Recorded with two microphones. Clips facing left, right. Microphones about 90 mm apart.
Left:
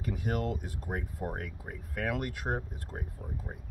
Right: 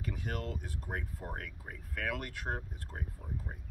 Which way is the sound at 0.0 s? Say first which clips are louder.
Left 6 dB; 15° left (ahead or behind).